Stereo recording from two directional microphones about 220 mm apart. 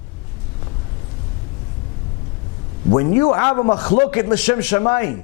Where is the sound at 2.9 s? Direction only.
25° left (ahead or behind).